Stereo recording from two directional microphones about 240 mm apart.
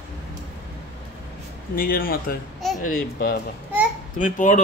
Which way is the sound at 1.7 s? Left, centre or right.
Left.